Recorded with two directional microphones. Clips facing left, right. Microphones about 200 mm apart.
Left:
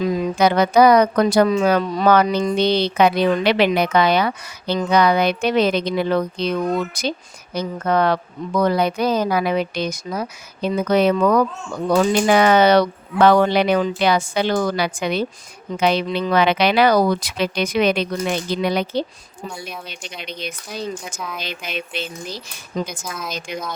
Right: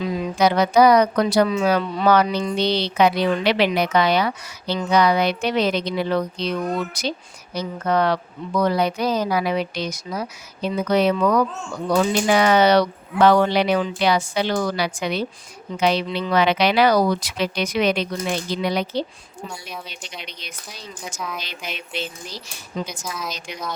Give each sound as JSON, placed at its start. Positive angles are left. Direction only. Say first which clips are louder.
{"t": 0.0, "sound": "speech", "louder": "left 2 dB", "side_deg": 55}
{"t": 20.1, "sound": "speech", "louder": "left 7 dB", "side_deg": 55}
{"t": 21.2, "sound": "speech", "louder": "even", "side_deg": 0}
{"t": 21.4, "sound": "speech", "louder": "left 5 dB", "side_deg": 55}